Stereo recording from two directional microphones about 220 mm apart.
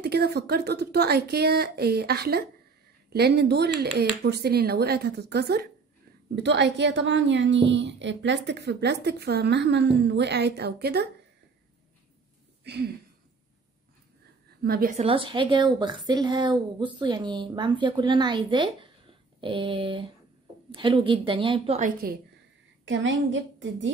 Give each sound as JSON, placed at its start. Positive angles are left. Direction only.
{"t": 0.0, "sound": "a woman's voice", "side_deg": -45}
{"t": 12.7, "sound": "a woman's voice", "side_deg": -50}
{"t": 14.6, "sound": "a woman's voice", "side_deg": -45}
{"t": 15.0, "sound": "a woman's voice", "side_deg": -25}
{"t": 22.8, "sound": "a woman's voice", "side_deg": -55}